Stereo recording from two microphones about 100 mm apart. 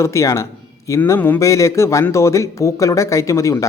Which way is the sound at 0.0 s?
30° left (ahead or behind).